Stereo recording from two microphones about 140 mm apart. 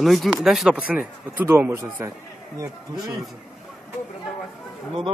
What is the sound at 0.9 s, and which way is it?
A man's voice, 10° right (ahead or behind).